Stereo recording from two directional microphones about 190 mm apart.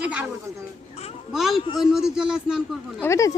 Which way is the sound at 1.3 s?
Centre (ahead or behind).